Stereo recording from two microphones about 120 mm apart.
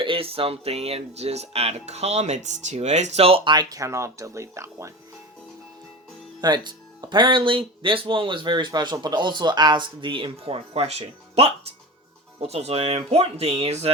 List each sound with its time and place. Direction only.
0.0 s speech: 50° right (ahead or behind)
3.5 s speech: 35° right (ahead or behind)
6.4 s speech: 35° right (ahead or behind); by 13.9 s 60° right (ahead or behind)